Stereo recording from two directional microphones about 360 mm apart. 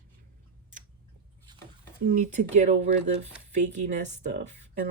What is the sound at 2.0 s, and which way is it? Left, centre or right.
Speech, right.